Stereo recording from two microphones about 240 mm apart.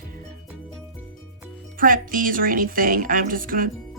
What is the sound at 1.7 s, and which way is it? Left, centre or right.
Speech, right.